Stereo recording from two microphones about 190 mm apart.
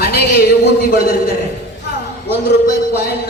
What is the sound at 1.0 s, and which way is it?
A man's voice, 55° left (ahead or behind).